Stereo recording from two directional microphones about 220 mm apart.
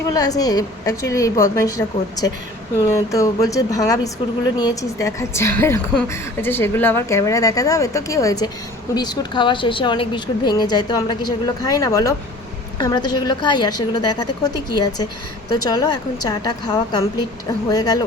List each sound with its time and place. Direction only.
0.1 s a woman's voice: 15° left (ahead or behind)